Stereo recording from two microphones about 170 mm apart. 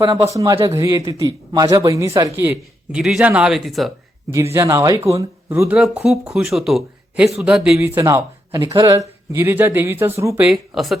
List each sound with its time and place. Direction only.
0.3 s a man's voice: 20° right (ahead or behind)
2.4 s speech: 10° right (ahead or behind)
4.5 s speech: 15° right (ahead or behind); by 10.9 s centre (ahead or behind)